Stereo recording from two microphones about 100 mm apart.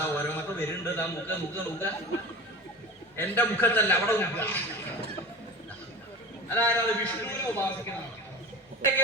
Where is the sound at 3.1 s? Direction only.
20° left (ahead or behind).